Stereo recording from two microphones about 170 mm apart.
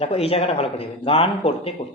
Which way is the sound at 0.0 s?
35° left (ahead or behind).